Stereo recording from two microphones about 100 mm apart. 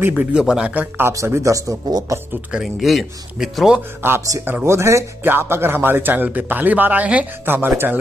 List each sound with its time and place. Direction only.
0.1 s speech: 10° right (ahead or behind)
0.7 s speech: 20° right (ahead or behind); by 2.1 s 40° right (ahead or behind)
2.5 s speech: centre (ahead or behind)
4.0 s a man's voice: 20° right (ahead or behind)